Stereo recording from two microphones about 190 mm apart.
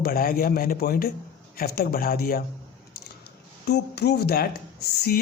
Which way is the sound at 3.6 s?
60° left (ahead or behind).